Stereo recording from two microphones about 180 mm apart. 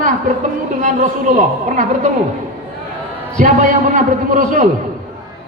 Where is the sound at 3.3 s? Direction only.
45° right (ahead or behind).